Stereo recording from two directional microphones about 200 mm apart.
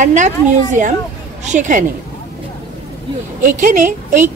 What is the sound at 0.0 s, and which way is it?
A woman's voice, 40° right (ahead or behind).